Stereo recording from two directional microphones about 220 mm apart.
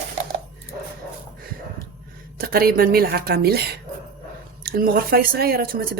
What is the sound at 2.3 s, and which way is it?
Chopping, 40° right (ahead or behind).